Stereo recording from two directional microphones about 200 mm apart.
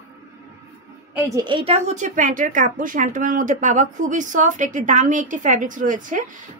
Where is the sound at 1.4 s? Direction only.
25° right (ahead or behind).